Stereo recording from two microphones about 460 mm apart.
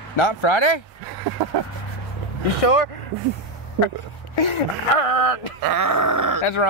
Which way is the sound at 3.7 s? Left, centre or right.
Left.